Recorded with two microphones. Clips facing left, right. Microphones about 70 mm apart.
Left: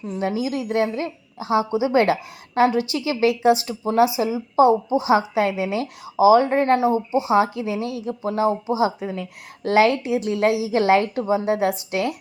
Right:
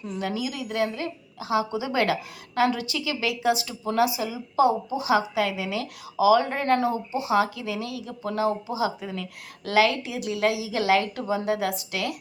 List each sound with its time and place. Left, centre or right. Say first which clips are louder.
0.0 s a woman's voice: left 5 dB; left